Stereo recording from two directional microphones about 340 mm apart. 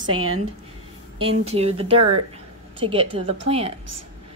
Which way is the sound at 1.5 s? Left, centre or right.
Centre.